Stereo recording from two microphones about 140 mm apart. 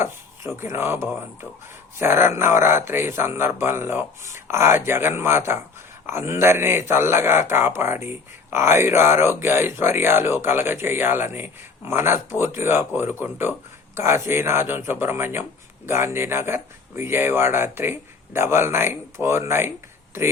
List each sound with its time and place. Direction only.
0.0 s speech: 20° right (ahead or behind)